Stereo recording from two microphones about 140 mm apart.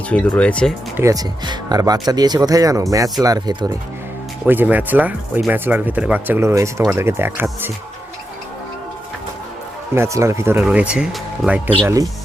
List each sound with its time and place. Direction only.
0.1 s speech: 10° left (ahead or behind)
0.9 s speech: 25° right (ahead or behind)
4.4 s speech: 15° right (ahead or behind)
9.9 s speech: 20° right (ahead or behind)